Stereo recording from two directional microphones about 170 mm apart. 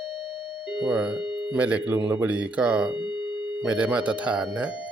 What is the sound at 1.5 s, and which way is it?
Speech, 5° right (ahead or behind).